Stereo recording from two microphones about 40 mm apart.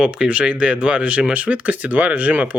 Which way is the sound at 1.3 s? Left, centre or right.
Right.